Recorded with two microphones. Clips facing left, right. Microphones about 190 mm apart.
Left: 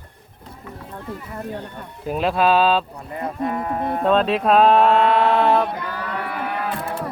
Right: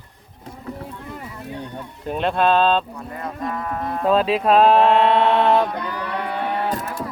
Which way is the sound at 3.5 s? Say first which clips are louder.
Left 2 dB; 25° left (ahead or behind).